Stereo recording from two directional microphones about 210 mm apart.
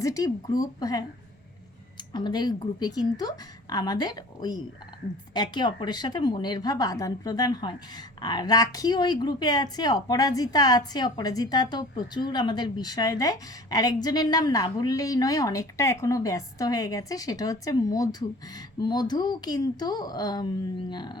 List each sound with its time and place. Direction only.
0.0 s a woman's voice: 15° left (ahead or behind)
2.1 s a woman's voice: 20° left (ahead or behind)